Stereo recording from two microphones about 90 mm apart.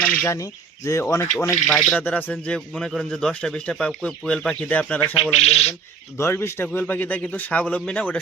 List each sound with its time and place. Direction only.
0.0 s bird: 15° left (ahead or behind)
0.3 s speech: 40° left (ahead or behind)
1.6 s a man's voice: 5° left (ahead or behind)
2.0 s a man's voice: 20° left (ahead or behind)
2.6 s speech: 5° left (ahead or behind)
4.6 s speech: 15° left (ahead or behind)
6.1 s a man's voice: 30° left (ahead or behind)